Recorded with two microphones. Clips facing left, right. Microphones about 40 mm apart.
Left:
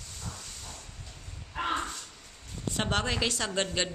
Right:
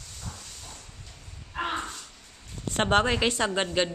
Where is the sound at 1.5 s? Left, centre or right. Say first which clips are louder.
Even; centre.